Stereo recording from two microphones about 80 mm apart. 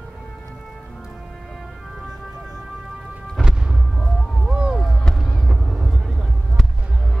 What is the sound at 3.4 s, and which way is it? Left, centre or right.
Music, centre.